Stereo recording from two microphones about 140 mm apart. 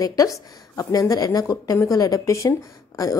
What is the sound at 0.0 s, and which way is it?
A woman's voice, 25° left (ahead or behind).